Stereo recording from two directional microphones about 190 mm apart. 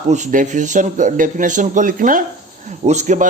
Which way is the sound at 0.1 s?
40° right (ahead or behind).